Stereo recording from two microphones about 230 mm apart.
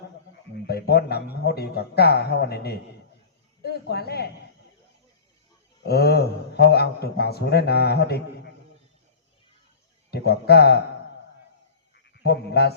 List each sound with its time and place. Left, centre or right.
0.7 s a man's voice: left
5.8 s a man's voice: left
10.1 s a man's voice: left
11.9 s frog: left